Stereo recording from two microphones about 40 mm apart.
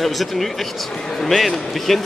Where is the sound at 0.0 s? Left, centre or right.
Centre.